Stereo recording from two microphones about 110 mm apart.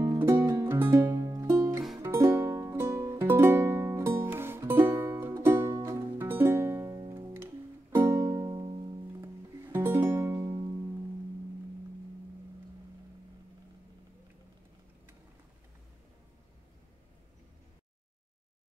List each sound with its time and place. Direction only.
0.0 s music: 30° right (ahead or behind); by 8.9 s 50° right (ahead or behind)
9.2 s music: 20° right (ahead or behind)